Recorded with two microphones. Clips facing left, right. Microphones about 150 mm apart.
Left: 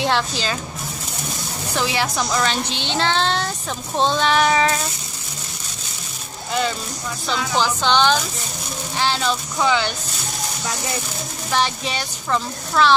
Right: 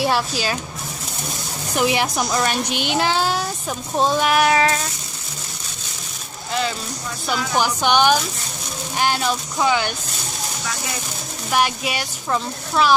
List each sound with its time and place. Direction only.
0.0 s a woman's voice: 10° right (ahead or behind)
1.8 s a woman's voice: 15° right (ahead or behind)
7.2 s a woman's voice: 10° right (ahead or behind)
11.5 s a woman's voice: 10° right (ahead or behind)